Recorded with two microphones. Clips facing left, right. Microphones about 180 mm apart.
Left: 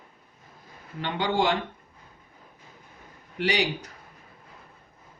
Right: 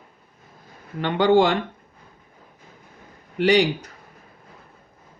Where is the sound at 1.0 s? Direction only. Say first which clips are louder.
Right 9 dB; 55° right (ahead or behind).